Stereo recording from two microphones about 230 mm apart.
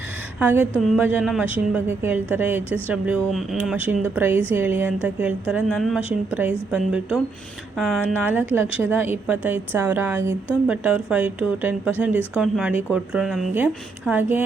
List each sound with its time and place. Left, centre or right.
0.3 s a woman's voice: centre